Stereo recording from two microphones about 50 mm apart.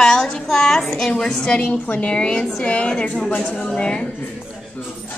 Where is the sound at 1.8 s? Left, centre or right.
Left.